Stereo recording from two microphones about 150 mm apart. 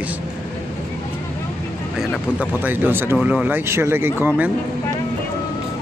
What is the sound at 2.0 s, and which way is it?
Speech, 10° right (ahead or behind).